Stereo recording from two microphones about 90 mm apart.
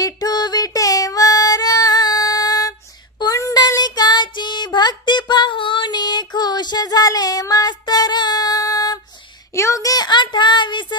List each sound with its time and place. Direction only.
0.0 s female singing: 45° left (ahead or behind)
3.2 s child singing: 40° left (ahead or behind); by 11.0 s 60° left (ahead or behind)